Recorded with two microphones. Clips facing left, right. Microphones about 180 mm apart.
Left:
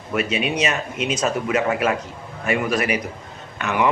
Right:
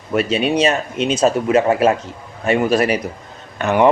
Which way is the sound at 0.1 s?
35° right (ahead or behind).